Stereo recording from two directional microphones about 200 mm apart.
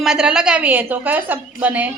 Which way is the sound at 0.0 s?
5° right (ahead or behind).